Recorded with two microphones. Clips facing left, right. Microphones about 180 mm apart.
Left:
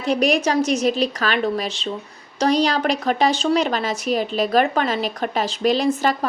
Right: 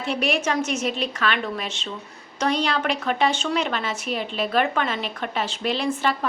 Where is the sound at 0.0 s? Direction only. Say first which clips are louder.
Left 5 dB; 40° left (ahead or behind).